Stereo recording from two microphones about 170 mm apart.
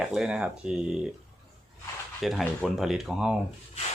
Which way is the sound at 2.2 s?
Centre (ahead or behind).